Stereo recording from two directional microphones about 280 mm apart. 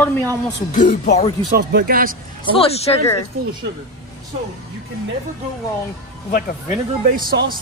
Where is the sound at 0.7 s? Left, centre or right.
Left.